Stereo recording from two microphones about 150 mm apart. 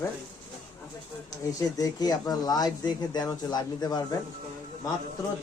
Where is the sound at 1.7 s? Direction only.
25° left (ahead or behind).